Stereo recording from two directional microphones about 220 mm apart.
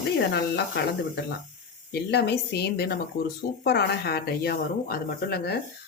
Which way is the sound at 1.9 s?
45° left (ahead or behind).